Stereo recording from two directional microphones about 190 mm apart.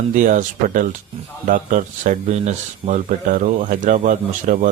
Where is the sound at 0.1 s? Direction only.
45° right (ahead or behind).